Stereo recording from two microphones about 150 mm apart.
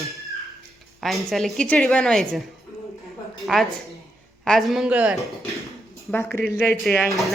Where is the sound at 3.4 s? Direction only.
Centre (ahead or behind).